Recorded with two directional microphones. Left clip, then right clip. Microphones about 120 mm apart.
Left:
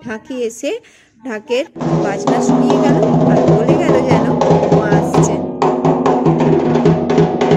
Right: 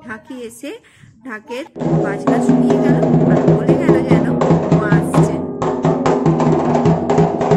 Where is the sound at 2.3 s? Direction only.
30° left (ahead or behind).